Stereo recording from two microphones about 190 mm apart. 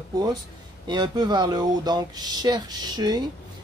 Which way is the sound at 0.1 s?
20° right (ahead or behind).